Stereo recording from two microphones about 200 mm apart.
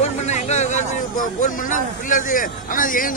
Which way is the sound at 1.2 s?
40° left (ahead or behind).